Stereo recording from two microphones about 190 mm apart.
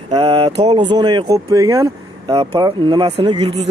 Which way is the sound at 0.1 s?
30° right (ahead or behind).